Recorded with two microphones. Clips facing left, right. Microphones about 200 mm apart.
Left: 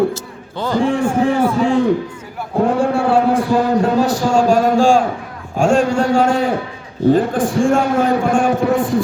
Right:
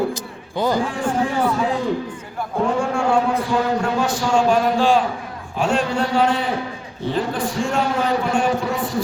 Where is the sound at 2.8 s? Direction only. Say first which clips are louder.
Left 5 dB; 35° left (ahead or behind).